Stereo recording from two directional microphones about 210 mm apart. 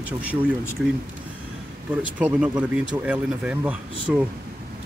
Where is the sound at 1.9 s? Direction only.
5° right (ahead or behind).